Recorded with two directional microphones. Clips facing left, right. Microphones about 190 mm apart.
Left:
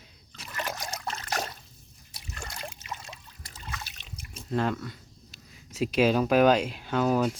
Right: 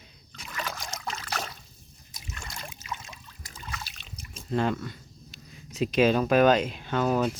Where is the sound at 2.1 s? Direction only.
35° left (ahead or behind).